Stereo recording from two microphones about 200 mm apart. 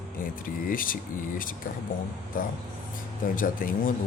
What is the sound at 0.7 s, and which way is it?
Speech, 45° left (ahead or behind).